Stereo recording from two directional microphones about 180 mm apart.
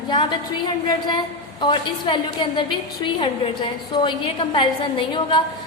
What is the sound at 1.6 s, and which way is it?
A woman's voice, 25° left (ahead or behind).